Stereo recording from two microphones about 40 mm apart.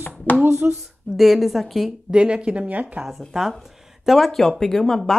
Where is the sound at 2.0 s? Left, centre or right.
Right.